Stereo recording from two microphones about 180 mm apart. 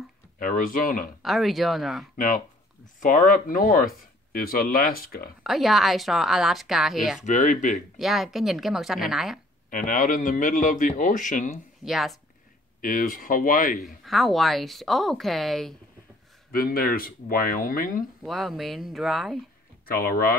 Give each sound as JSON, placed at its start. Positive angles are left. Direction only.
{"t": 0.4, "sound": "speech", "side_deg": 50}
{"t": 1.2, "sound": "speech", "side_deg": 0}
{"t": 2.1, "sound": "speech", "side_deg": 50}
{"t": 5.4, "sound": "speech", "side_deg": 0}
{"t": 7.2, "sound": "speech", "side_deg": 45}
{"t": 8.0, "sound": "speech", "side_deg": 0}
{"t": 9.7, "sound": "speech", "side_deg": 50}
{"t": 11.8, "sound": "speech", "side_deg": 0}
{"t": 12.8, "sound": "speech", "side_deg": 50}
{"t": 13.8, "sound": "speech", "side_deg": 0}
{"t": 16.5, "sound": "speech", "side_deg": 55}
{"t": 18.2, "sound": "speech", "side_deg": 0}
{"t": 19.9, "sound": "speech", "side_deg": 55}